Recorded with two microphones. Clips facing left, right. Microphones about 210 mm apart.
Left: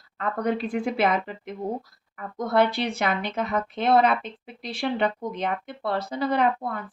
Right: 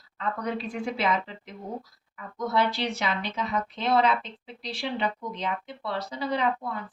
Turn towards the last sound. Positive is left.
turn(degrees=55)  # may be behind; listen again after turning